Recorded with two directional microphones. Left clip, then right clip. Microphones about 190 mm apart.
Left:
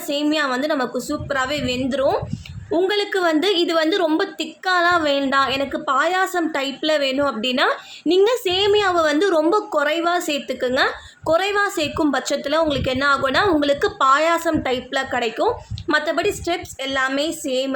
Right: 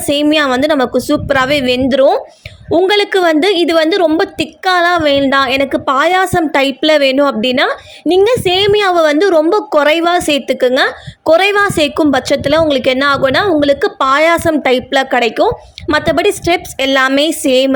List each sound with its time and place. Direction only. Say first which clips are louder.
0.0 s a woman's voice: right 9 dB; 40° right (ahead or behind)